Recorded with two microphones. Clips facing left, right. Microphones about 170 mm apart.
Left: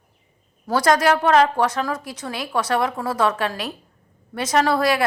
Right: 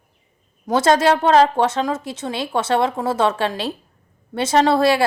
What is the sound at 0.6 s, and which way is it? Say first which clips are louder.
A woman's voice: right 2 dB; 25° right (ahead or behind).